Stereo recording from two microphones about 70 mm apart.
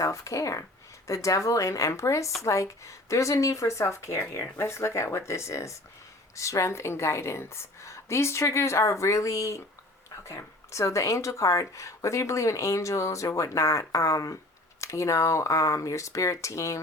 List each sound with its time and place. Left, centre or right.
0.0 s speech: left